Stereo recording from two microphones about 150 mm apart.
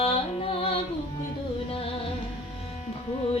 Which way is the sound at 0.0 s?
40° left (ahead or behind).